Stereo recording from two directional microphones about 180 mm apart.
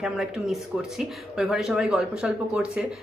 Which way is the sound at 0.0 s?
5° right (ahead or behind).